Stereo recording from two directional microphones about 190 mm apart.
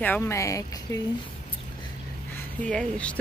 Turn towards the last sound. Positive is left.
turn(degrees=5)  # may be behind; listen again after turning